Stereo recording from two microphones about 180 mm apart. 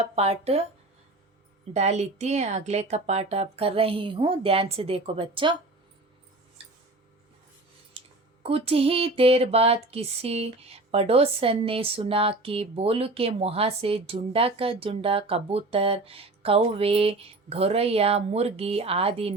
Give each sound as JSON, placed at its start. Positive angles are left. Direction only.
{"t": 0.0, "sound": "speech", "side_deg": -35}
{"t": 1.7, "sound": "speech", "side_deg": -35}
{"t": 8.4, "sound": "speech", "side_deg": -35}